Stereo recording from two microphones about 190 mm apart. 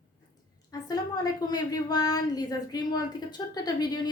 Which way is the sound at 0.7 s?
20° left (ahead or behind).